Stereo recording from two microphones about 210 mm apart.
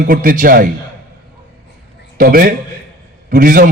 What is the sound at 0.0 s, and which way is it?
Speech, 40° right (ahead or behind).